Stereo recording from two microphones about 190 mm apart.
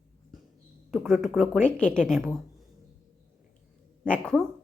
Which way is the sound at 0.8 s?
Centre (ahead or behind).